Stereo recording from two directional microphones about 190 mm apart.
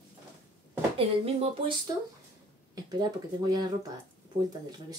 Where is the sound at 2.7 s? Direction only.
20° right (ahead or behind).